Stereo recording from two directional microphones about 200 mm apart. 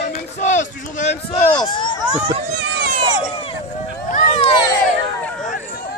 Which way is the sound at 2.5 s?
60° right (ahead or behind).